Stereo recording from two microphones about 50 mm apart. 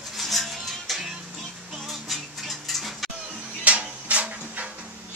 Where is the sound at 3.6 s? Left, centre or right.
Right.